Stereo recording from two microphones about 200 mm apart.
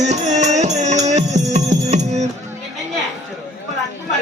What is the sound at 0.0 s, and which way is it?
Music, 35° right (ahead or behind).